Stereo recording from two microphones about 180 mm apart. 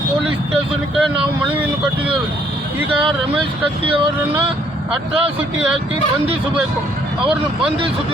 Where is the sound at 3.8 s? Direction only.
30° right (ahead or behind).